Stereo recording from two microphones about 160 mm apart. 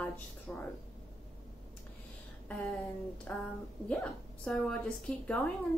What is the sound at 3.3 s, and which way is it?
A woman's voice, 10° left (ahead or behind).